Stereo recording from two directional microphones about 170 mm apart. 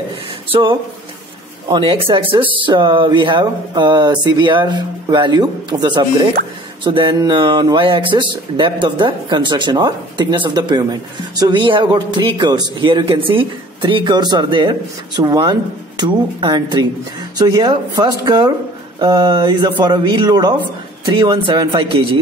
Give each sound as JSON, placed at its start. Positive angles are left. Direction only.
{"t": 0.5, "sound": "speech", "side_deg": -30}